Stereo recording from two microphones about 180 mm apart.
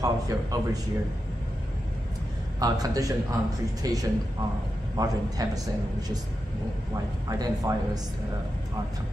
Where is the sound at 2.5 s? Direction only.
20° right (ahead or behind).